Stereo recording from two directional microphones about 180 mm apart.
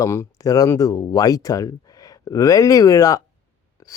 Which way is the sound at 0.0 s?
15° left (ahead or behind).